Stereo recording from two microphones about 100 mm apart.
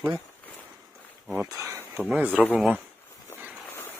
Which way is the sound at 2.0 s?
15° right (ahead or behind).